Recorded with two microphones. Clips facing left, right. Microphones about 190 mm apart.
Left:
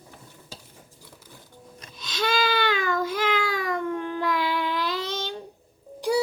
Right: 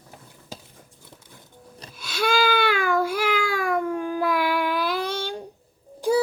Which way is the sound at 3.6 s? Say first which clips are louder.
Right 3 dB; 10° right (ahead or behind).